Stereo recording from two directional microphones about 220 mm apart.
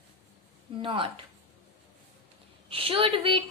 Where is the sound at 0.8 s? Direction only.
20° right (ahead or behind).